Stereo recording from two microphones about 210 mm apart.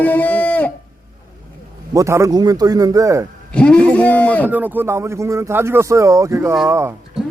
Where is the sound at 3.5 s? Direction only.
5° left (ahead or behind).